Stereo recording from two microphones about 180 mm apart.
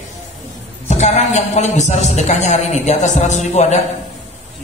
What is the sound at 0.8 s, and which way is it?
A woman's voice, 40° left (ahead or behind).